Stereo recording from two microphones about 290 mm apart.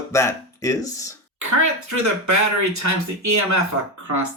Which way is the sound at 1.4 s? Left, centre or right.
Right.